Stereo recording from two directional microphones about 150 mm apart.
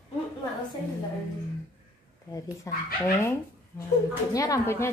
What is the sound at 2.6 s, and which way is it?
A woman's voice, 20° left (ahead or behind).